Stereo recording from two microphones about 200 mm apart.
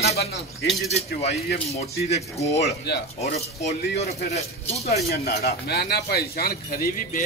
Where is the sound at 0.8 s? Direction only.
30° left (ahead or behind).